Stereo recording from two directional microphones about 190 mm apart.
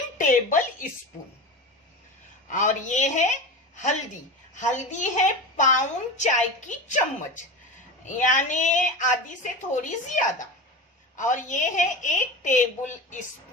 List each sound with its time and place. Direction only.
0.2 s a sound: 40° left (ahead or behind)
2.5 s a woman's voice: 40° left (ahead or behind)
4.5 s a woman's voice: 40° left (ahead or behind)
8.0 s a woman's voice: 40° left (ahead or behind)